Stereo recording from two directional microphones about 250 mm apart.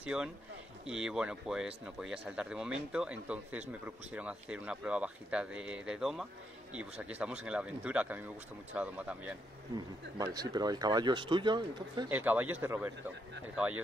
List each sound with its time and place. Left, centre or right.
0.0 s speech: centre
9.8 s speech: centre
12.1 s speech: centre